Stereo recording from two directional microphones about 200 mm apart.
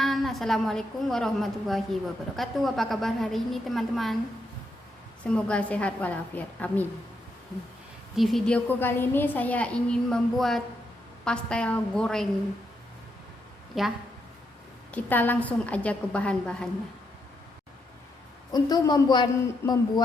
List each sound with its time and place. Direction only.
0.0 s a woman's voice: centre (ahead or behind)
5.2 s a woman's voice: 5° left (ahead or behind)
8.1 s a woman's voice: centre (ahead or behind)
13.7 s a woman's voice: centre (ahead or behind)
14.9 s a woman's voice: 10° left (ahead or behind)
18.5 s a woman's voice: 20° left (ahead or behind)